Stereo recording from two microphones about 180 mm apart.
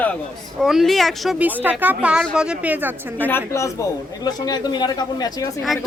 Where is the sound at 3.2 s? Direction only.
15° left (ahead or behind).